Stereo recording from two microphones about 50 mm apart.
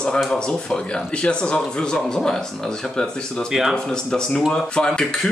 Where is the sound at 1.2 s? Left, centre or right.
Left.